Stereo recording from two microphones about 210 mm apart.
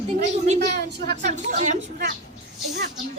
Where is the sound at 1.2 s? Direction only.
35° right (ahead or behind).